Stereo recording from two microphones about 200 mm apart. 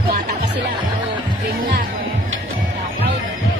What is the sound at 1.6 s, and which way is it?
Music, 40° right (ahead or behind).